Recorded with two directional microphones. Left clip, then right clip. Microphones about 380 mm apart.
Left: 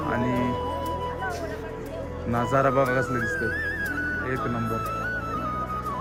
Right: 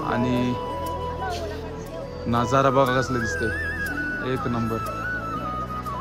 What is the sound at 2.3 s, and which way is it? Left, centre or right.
Speech, centre.